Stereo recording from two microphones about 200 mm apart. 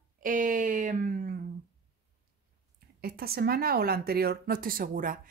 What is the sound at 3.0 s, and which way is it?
A woman's voice, 50° right (ahead or behind).